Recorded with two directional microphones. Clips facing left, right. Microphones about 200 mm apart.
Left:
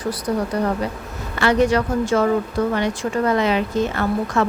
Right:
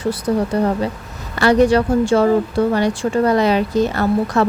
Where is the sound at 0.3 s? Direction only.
30° right (ahead or behind).